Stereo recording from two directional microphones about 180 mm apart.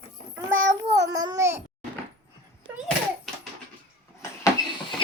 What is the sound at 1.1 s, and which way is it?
Speech, 20° right (ahead or behind).